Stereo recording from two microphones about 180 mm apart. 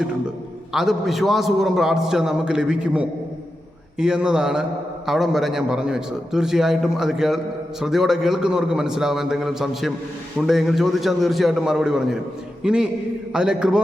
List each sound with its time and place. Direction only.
0.7 s a man's voice: centre (ahead or behind)